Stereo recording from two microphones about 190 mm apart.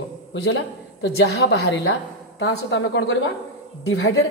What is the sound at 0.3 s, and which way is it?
A man's voice, 65° left (ahead or behind).